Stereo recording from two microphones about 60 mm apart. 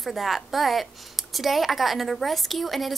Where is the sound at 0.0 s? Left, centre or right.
Centre.